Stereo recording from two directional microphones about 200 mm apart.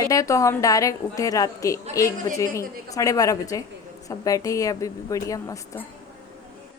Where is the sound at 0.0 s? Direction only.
15° left (ahead or behind).